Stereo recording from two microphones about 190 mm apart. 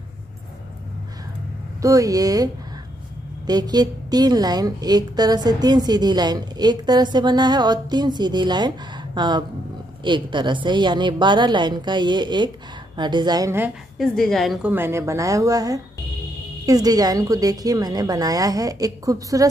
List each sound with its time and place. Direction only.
1.8 s a woman's voice: 20° right (ahead or behind)
13.9 s a woman's voice: centre (ahead or behind)
14.7 s a woman's voice: 10° right (ahead or behind)